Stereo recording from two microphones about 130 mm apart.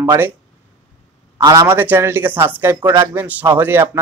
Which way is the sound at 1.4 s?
30° right (ahead or behind).